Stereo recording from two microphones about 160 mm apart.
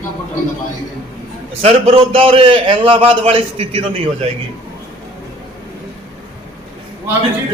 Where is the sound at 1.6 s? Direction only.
40° right (ahead or behind).